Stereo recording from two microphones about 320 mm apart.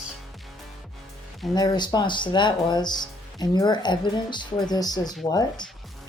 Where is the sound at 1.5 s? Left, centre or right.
Centre.